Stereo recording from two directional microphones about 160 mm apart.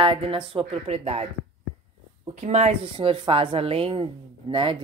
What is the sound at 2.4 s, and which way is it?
A woman's voice, 45° right (ahead or behind).